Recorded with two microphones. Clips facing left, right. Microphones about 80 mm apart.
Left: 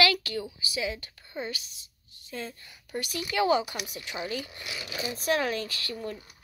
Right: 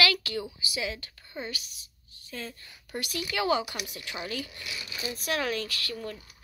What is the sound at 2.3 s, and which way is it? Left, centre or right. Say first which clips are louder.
Speech: left 2 dB; centre.